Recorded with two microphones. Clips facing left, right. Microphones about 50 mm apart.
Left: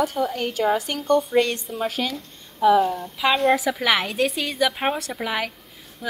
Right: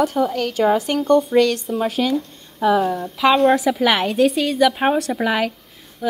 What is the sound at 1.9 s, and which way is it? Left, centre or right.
Speech, centre.